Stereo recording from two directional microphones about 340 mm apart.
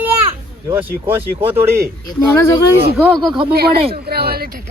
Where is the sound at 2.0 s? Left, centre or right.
Centre.